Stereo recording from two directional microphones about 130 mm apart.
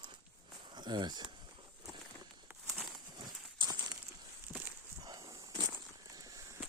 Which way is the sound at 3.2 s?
35° right (ahead or behind).